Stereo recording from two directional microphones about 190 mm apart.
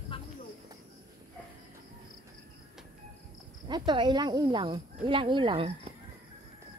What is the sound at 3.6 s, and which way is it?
Speech, 20° right (ahead or behind).